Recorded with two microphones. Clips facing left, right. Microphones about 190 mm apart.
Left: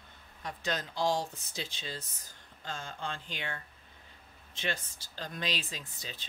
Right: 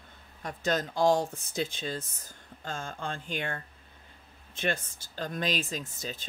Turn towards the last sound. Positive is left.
turn(degrees=-45)  # may be behind; listen again after turning